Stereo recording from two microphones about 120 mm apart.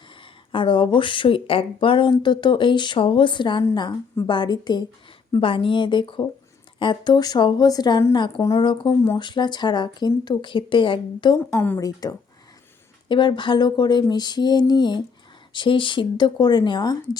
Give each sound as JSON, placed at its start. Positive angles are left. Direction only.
{"t": 0.5, "sound": "speech", "side_deg": 45}
{"t": 8.6, "sound": "speech", "side_deg": 40}
{"t": 11.3, "sound": "a woman's voice", "side_deg": 15}
{"t": 11.8, "sound": "speech", "side_deg": 30}